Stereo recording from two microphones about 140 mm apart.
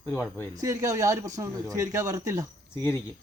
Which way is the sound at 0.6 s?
25° right (ahead or behind).